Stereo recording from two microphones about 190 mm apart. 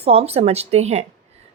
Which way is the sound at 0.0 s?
30° right (ahead or behind).